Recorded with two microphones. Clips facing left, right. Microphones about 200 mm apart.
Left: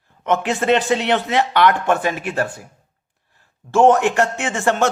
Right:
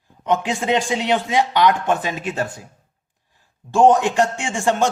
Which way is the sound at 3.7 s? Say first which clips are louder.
Left 1 dB; 15° right (ahead or behind).